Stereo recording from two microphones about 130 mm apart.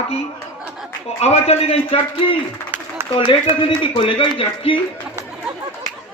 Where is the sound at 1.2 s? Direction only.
50° left (ahead or behind).